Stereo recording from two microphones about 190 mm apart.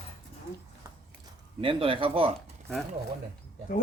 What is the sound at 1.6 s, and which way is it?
Speech, 25° right (ahead or behind).